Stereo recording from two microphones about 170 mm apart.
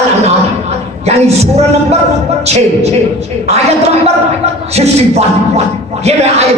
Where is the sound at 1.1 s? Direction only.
40° right (ahead or behind).